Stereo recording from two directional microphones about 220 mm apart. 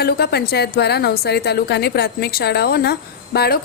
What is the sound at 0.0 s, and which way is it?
A woman's voice, 45° left (ahead or behind).